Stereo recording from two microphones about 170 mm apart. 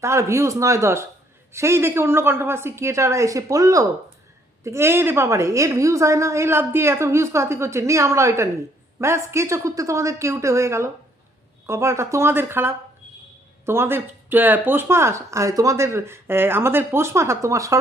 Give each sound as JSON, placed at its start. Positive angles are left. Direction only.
{"t": 0.0, "sound": "speech", "side_deg": -15}